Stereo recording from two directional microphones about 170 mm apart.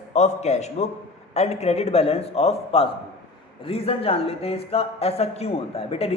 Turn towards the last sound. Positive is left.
turn(degrees=35)  # may be behind; listen again after turning